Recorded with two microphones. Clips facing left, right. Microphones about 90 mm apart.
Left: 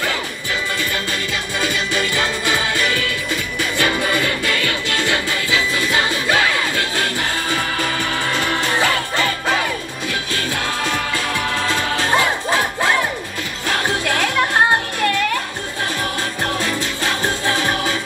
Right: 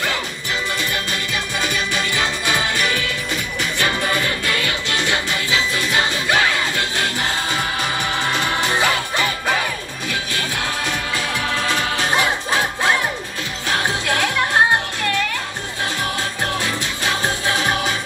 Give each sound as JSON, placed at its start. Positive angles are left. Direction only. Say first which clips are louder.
{"t": 1.6, "sound": "music", "louder": "left 3 dB", "side_deg": -20}
{"t": 13.7, "sound": "music", "louder": "left 1 dB", "side_deg": -20}
{"t": 16.5, "sound": "music", "louder": "left 2 dB", "side_deg": -20}